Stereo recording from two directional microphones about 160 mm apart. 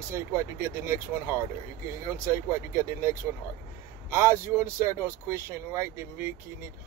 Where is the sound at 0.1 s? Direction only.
15° right (ahead or behind).